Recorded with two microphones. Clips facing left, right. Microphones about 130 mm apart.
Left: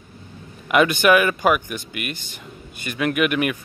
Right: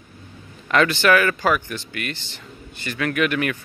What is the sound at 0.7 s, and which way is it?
Speech, 15° left (ahead or behind).